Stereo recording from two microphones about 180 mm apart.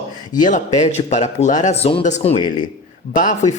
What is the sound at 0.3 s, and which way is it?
Speech, 45° left (ahead or behind).